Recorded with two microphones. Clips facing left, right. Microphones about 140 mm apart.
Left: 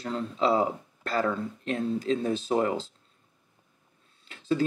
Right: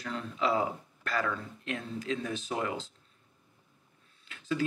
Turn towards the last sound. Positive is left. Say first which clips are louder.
# left 5 dB
turn(degrees=30)  # may be behind; listen again after turning